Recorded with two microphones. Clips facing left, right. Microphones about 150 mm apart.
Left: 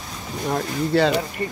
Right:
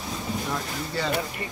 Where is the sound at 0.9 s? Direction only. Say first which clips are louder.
Left 12 dB; 65° left (ahead or behind).